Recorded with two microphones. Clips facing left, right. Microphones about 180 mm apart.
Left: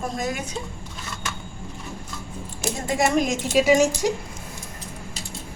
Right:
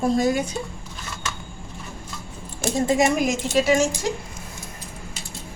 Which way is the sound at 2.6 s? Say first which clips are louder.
Right 4 dB; 50° right (ahead or behind).